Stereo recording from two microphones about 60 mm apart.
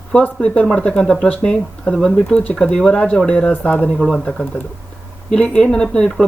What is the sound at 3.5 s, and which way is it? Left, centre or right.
Speech, left.